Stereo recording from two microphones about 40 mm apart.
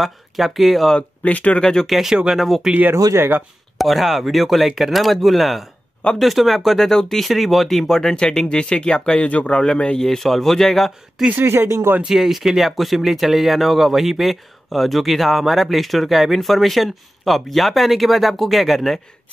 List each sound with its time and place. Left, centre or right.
0.0 s speech: centre
0.9 s speech: left
1.6 s speech: centre
1.9 s speech: centre
3.7 s speech: centre; by 9.5 s left
9.5 s speech: centre
11.4 s speech: right
12.0 s speech: centre